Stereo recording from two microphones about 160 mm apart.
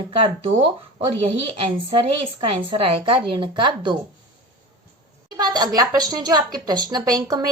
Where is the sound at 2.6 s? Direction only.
30° right (ahead or behind).